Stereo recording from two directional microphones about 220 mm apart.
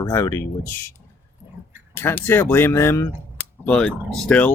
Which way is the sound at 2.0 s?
10° left (ahead or behind).